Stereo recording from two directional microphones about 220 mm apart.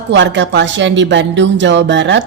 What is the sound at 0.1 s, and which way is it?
A woman's voice, 55° right (ahead or behind).